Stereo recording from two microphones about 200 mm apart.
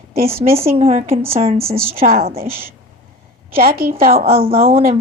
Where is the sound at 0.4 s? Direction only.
25° right (ahead or behind).